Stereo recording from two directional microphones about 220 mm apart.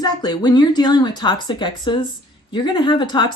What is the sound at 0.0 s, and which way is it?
Speech, 20° left (ahead or behind).